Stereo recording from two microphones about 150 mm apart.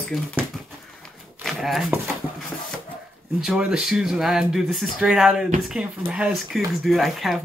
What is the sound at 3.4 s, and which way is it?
Speech, 5° right (ahead or behind).